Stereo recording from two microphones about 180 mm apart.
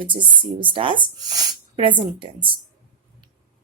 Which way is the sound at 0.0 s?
25° right (ahead or behind).